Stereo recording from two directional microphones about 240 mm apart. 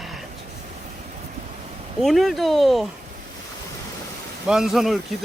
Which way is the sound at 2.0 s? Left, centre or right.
Centre.